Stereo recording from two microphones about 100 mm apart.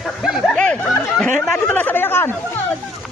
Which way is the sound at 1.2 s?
15° left (ahead or behind).